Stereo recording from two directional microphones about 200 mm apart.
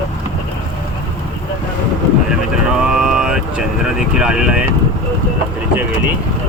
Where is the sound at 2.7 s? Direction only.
5° right (ahead or behind).